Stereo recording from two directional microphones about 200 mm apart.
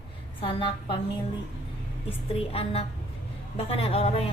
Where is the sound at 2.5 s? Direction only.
30° left (ahead or behind).